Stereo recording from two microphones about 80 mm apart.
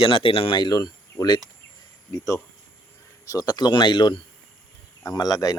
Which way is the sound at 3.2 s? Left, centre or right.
Left.